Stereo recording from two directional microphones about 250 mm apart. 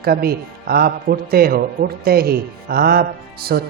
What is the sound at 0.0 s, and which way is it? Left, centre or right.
A man's voice, right.